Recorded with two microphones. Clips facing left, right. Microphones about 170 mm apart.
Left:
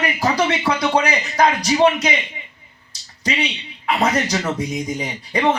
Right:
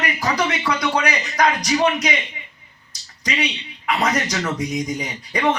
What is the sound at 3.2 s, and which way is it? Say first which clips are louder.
Speech: left 1 dB; 30° left (ahead or behind).